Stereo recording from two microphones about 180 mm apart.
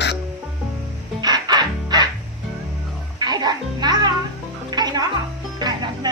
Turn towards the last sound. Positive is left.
turn(degrees=-25)  # may be behind; listen again after turning